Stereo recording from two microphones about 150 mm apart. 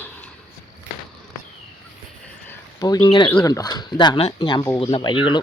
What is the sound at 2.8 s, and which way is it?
Speech, 25° left (ahead or behind).